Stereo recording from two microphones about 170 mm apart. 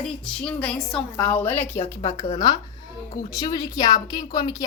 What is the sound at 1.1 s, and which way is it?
Speech, 15° left (ahead or behind).